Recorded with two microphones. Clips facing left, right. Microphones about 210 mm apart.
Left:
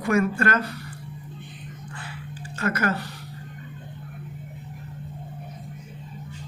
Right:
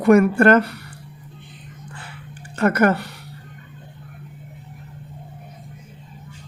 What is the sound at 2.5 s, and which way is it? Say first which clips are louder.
Speech: right 8 dB; 60° right (ahead or behind).